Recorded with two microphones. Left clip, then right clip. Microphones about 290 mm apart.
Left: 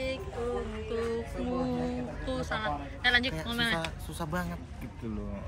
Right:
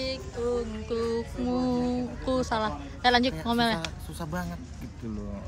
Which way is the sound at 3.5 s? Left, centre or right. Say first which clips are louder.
Right 5 dB; centre.